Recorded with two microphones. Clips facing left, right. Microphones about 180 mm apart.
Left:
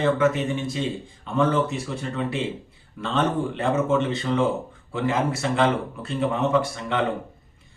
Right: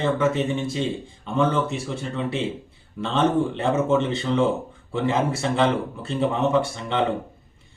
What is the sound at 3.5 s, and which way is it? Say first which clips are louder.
Speech: right 1 dB; 25° right (ahead or behind).